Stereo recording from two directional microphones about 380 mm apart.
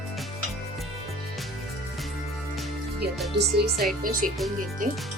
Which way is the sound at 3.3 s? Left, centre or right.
Right.